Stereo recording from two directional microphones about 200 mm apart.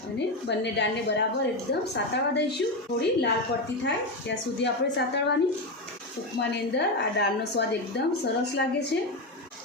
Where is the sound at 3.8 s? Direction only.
60° left (ahead or behind).